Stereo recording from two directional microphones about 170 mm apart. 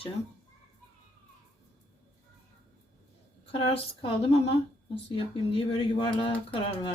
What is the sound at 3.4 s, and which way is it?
Speech, 35° left (ahead or behind).